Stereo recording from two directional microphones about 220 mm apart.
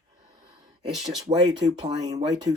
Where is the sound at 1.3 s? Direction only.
25° right (ahead or behind).